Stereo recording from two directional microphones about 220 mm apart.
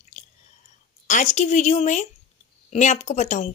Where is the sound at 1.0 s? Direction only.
35° left (ahead or behind).